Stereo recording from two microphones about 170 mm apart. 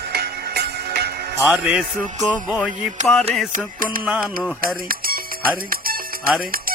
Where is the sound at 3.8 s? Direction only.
55° right (ahead or behind).